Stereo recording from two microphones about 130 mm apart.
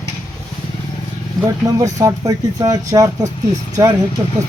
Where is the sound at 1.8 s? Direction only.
25° right (ahead or behind).